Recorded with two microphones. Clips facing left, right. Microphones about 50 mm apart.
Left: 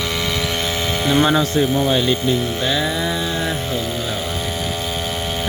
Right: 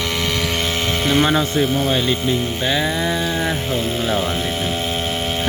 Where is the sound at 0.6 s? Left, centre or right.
Right.